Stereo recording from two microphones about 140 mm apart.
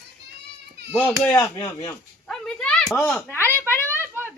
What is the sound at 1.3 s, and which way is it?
Speech, 25° left (ahead or behind).